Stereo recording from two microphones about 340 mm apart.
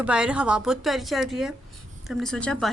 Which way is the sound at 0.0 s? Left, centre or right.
Centre.